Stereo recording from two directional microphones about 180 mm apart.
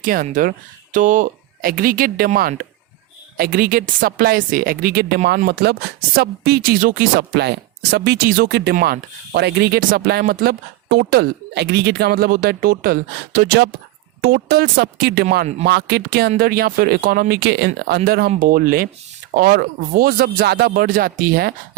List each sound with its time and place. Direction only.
0.0 s speech: 50° right (ahead or behind)